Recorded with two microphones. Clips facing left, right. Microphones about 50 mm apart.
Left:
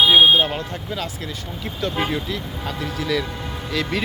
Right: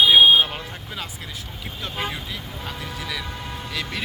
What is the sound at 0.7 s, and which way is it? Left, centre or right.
Speech, centre.